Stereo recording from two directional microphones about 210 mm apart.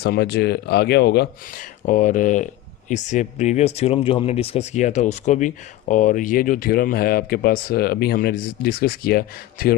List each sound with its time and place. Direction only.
0.0 s speech: 50° left (ahead or behind)